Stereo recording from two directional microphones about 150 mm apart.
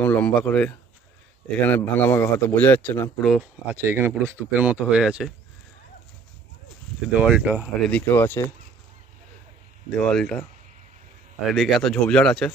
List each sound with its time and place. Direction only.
0.0 s speech: 10° left (ahead or behind)
3.2 s speech: centre (ahead or behind)
3.6 s speech: 15° right (ahead or behind)
7.2 s speech: 10° right (ahead or behind)
7.9 s speech: 15° left (ahead or behind)
9.8 s speech: 5° left (ahead or behind)
11.5 s speech: centre (ahead or behind)